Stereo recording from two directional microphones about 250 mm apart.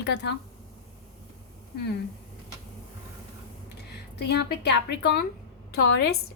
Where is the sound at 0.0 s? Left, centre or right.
Left.